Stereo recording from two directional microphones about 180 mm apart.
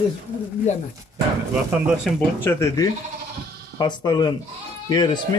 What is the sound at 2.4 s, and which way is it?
Speech, 15° left (ahead or behind).